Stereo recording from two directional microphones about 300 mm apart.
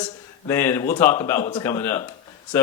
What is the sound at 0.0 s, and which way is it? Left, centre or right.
A man's voice, centre.